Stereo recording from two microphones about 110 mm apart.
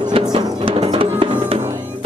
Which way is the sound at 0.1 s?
55° right (ahead or behind).